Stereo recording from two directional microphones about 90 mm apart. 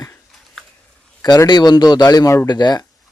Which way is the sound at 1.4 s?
50° left (ahead or behind).